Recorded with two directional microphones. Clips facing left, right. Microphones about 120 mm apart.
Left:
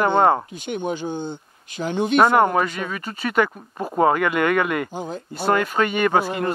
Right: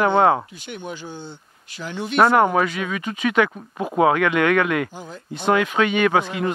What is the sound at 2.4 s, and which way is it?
Speech, centre (ahead or behind).